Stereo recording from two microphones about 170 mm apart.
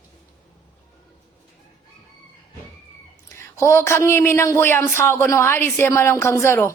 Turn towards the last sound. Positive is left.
turn(degrees=15)  # may be behind; listen again after turning